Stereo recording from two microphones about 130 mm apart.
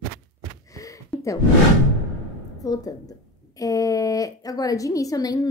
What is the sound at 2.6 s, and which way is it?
Speech, 30° left (ahead or behind).